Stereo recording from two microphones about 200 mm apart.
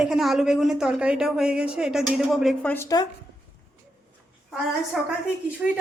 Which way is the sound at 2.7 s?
15° left (ahead or behind).